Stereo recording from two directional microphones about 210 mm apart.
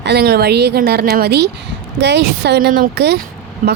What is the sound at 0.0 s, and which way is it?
A woman's voice, 50° right (ahead or behind).